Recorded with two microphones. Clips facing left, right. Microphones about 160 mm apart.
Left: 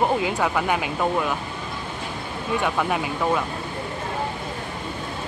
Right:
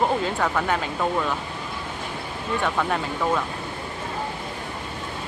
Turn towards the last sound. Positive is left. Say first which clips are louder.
# left 1 dB
turn(degrees=10)  # may be behind; listen again after turning